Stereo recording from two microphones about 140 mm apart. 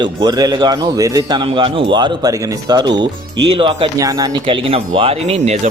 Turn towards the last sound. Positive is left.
turn(degrees=-50)  # may be behind; listen again after turning